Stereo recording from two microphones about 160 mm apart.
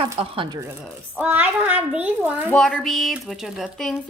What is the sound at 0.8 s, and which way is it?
A child's voice, 5° right (ahead or behind).